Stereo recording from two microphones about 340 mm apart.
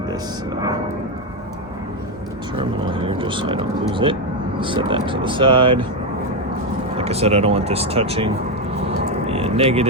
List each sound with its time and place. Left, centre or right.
2.6 s speech: centre
7.0 s speech: centre
9.2 s a sound: centre